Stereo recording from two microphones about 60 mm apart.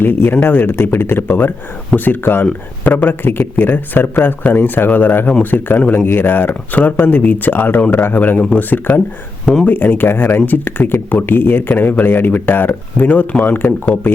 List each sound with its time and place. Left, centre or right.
0.0 s speech: left
8.4 s speech: left
9.6 s speech: left